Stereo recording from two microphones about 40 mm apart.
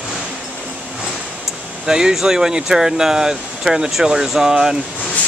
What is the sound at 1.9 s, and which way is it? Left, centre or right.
Speech, centre.